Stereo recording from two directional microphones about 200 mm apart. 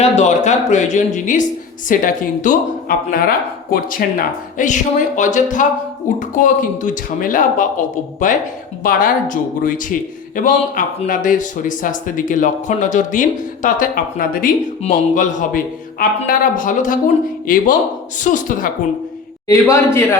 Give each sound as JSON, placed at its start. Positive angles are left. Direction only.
{"t": 0.0, "sound": "speech", "side_deg": 35}
{"t": 19.5, "sound": "a man's voice", "side_deg": 15}